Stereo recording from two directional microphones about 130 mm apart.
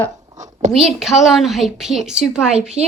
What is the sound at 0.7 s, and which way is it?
A woman's voice, 5° right (ahead or behind).